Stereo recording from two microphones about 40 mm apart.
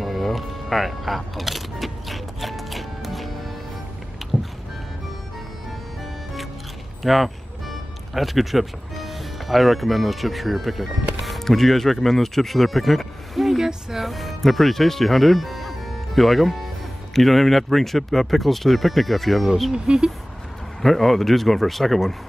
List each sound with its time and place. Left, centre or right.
0.0 s single-lens reflex camera: centre
4.2 s vehicle: centre
7.0 s speech: centre
13.6 s a sound: centre
14.0 s speech: centre
19.7 s speech: centre
20.8 s speech: centre